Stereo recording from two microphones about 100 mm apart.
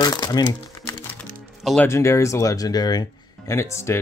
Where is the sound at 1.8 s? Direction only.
25° left (ahead or behind).